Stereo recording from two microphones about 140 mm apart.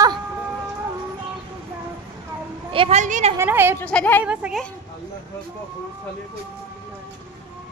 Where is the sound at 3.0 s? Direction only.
55° right (ahead or behind).